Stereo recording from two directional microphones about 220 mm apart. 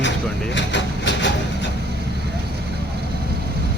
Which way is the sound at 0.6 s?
55° left (ahead or behind).